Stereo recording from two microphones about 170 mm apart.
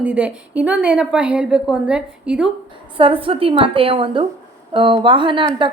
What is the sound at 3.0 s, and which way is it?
A woman's voice, 30° right (ahead or behind).